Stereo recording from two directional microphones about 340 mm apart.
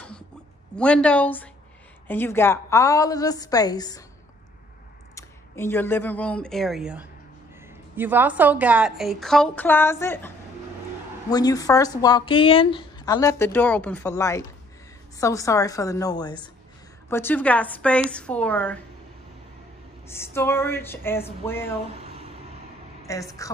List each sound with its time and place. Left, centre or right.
0.7 s a woman's voice: centre
5.1 s a woman's voice: centre
20.1 s speech: centre
22.0 s vehicle: centre
23.0 s speech: centre